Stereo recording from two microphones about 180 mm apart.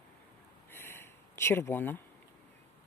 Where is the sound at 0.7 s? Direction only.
15° left (ahead or behind).